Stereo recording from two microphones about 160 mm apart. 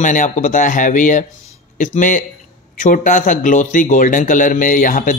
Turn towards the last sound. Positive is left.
turn(degrees=55)  # may be behind; listen again after turning